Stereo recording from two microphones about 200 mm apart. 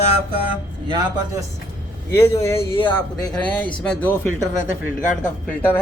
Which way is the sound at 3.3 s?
5° left (ahead or behind).